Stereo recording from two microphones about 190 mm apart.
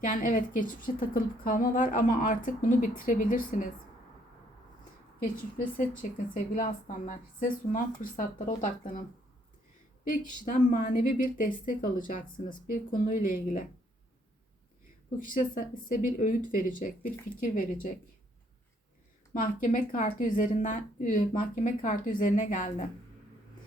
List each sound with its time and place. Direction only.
0.0 s a woman's voice: 45° left (ahead or behind)
5.7 s a woman's voice: 45° left (ahead or behind)
10.0 s a woman's voice: 45° left (ahead or behind)
15.2 s a woman's voice: 45° left (ahead or behind)
19.3 s a woman's voice: 45° left (ahead or behind)